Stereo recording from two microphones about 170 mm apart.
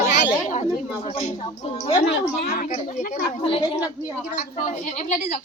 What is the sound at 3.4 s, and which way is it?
Speech, 30° left (ahead or behind).